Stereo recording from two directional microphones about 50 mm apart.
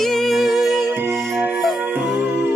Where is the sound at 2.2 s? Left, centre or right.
Right.